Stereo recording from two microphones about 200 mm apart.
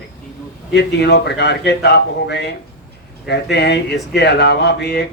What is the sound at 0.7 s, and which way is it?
A man's voice, 55° left (ahead or behind).